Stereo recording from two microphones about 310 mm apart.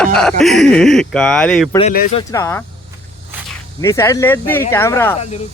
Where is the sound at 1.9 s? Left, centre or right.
Left.